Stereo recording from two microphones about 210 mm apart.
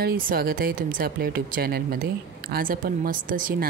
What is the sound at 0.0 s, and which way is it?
Speech, 45° right (ahead or behind).